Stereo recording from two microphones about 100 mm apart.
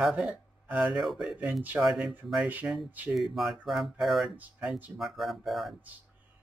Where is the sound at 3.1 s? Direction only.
Centre (ahead or behind).